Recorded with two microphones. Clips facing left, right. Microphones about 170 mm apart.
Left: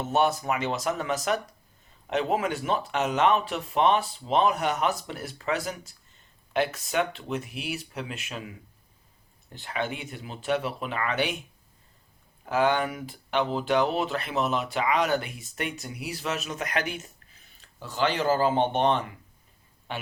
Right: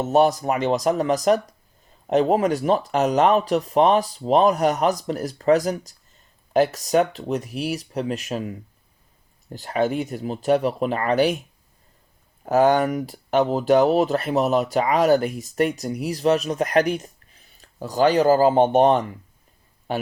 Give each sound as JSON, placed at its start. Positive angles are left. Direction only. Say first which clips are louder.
{"t": 0.0, "sound": "speech", "louder": "right 7 dB", "side_deg": -35}
{"t": 12.5, "sound": "a man's voice", "louder": "right 7 dB", "side_deg": -45}